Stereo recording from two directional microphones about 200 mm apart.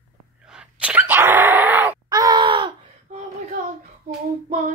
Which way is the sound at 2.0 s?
20° right (ahead or behind).